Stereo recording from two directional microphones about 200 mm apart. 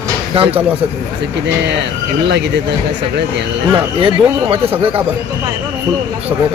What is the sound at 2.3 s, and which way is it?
Speech, 60° right (ahead or behind).